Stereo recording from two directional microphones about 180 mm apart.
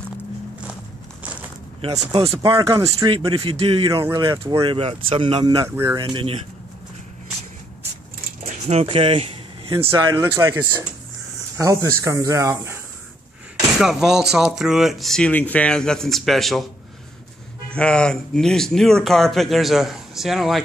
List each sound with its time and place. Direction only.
1.8 s speech: 30° right (ahead or behind)
3.9 s speech: 15° right (ahead or behind)
5.9 s speech: 30° right (ahead or behind)
8.6 s speech: 35° right (ahead or behind)
10.3 s speech: 15° right (ahead or behind)
13.7 s speech: centre (ahead or behind)
17.6 s speech: 5° left (ahead or behind)